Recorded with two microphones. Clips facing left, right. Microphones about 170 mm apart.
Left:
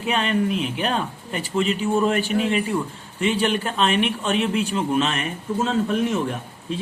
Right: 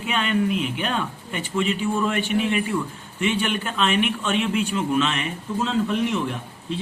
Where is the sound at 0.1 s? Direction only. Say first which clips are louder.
Left 1 dB; 35° left (ahead or behind).